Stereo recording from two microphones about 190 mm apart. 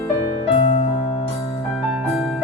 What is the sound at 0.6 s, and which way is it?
Music, 30° left (ahead or behind).